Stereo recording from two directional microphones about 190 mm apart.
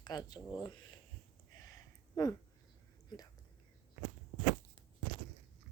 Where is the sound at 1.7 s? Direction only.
20° left (ahead or behind).